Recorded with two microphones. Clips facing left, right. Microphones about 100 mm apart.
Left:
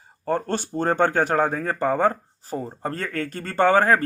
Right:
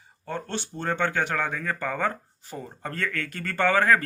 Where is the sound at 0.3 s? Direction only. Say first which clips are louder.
Left 8 dB; 45° left (ahead or behind).